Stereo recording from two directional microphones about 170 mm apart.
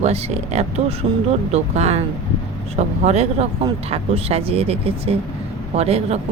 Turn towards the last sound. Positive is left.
turn(degrees=-35)  # may be behind; listen again after turning